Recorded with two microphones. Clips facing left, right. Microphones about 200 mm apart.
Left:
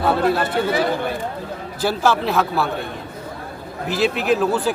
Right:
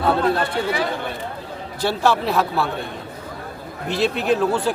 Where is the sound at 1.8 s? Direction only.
Centre (ahead or behind).